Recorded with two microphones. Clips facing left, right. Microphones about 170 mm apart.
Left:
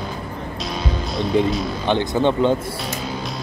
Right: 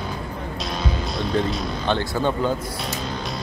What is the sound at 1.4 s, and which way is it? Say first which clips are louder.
Speech: left 5 dB; 10° left (ahead or behind).